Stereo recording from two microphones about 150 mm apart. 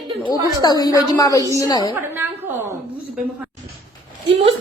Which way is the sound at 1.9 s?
15° right (ahead or behind).